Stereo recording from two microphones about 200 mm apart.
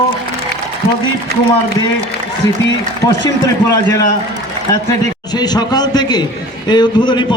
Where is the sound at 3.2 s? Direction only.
20° left (ahead or behind).